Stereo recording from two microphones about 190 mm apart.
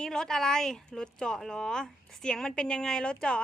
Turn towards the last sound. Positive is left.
turn(degrees=5)  # may be behind; listen again after turning